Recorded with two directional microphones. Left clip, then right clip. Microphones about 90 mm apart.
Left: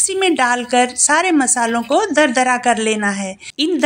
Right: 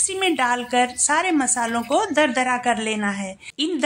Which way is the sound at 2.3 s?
30° left (ahead or behind).